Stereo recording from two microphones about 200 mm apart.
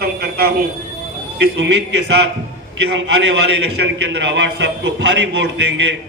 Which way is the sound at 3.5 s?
60° right (ahead or behind).